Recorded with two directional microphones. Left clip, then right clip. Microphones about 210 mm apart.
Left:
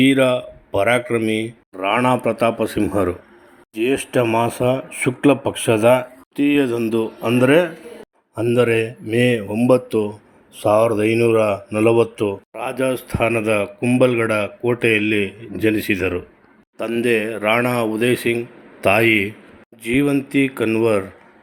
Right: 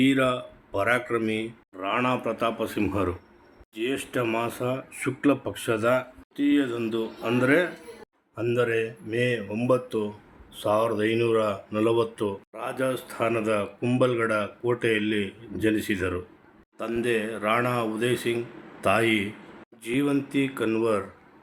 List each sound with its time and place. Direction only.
0.0 s speech: 25° left (ahead or behind)
9.5 s speech: 20° left (ahead or behind)